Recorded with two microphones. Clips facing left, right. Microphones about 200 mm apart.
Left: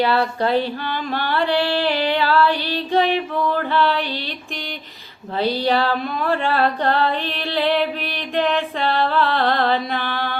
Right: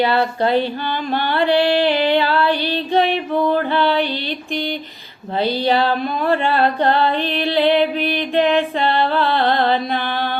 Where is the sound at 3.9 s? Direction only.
Centre (ahead or behind).